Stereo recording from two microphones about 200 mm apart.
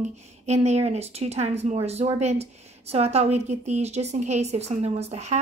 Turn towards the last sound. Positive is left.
turn(degrees=-35)  # may be behind; listen again after turning